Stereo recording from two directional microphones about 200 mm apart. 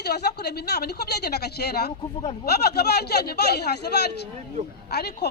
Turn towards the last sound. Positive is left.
turn(degrees=55)  # may be behind; listen again after turning